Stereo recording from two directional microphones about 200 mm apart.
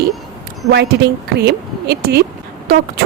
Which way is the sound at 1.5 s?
55° right (ahead or behind).